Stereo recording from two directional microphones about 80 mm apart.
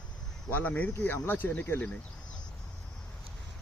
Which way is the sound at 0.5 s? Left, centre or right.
Centre.